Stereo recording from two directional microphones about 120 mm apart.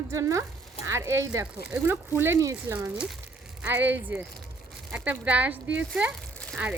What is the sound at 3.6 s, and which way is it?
A woman's voice, 15° right (ahead or behind).